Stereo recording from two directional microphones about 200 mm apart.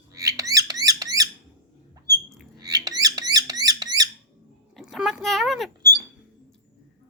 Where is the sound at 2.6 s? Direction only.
20° right (ahead or behind).